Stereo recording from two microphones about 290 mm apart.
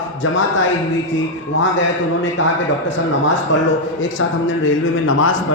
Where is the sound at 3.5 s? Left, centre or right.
Left.